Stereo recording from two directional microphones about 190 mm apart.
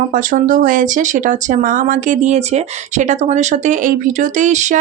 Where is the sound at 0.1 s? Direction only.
45° right (ahead or behind).